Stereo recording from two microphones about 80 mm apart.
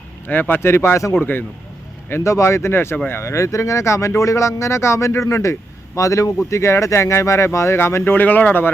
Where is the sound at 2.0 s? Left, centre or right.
Left.